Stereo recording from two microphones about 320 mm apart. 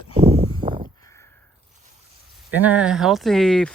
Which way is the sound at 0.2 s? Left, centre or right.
Centre.